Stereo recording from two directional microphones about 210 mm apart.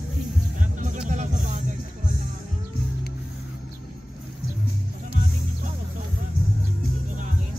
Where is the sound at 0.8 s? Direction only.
35° right (ahead or behind).